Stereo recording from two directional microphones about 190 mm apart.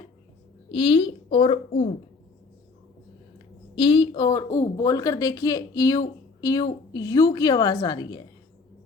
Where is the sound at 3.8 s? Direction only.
25° left (ahead or behind).